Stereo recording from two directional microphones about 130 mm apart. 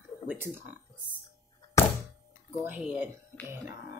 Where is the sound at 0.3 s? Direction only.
15° right (ahead or behind).